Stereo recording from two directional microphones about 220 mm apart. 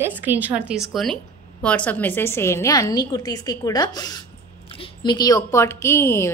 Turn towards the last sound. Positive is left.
turn(degrees=10)  # may be behind; listen again after turning